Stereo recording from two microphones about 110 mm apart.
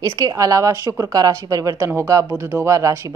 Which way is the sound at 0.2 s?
35° right (ahead or behind).